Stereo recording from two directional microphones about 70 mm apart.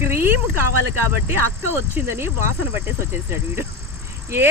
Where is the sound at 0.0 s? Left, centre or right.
Right.